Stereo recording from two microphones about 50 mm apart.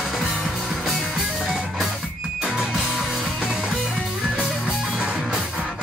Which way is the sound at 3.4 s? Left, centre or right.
Centre.